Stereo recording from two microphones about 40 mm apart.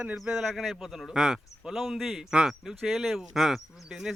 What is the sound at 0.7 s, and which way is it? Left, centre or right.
Speech, centre.